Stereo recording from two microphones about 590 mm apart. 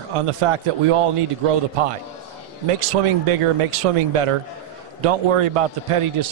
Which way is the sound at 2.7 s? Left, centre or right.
Right.